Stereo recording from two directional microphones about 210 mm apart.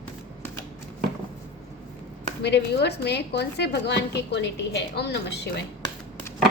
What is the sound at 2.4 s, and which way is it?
A woman's voice, 55° left (ahead or behind).